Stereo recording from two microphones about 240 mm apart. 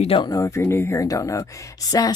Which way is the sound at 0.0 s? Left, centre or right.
Left.